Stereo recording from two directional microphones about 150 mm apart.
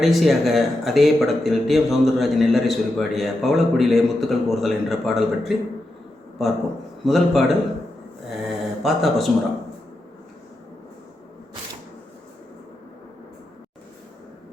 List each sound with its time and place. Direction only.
0.0 s speech: centre (ahead or behind)
7.0 s speech: centre (ahead or behind)
8.3 s mantra: centre (ahead or behind)